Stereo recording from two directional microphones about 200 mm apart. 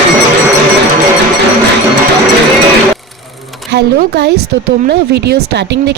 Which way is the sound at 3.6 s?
55° right (ahead or behind).